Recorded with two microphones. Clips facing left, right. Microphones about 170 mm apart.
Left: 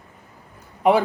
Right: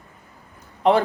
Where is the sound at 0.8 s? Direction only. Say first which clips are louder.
Even; 10° left (ahead or behind).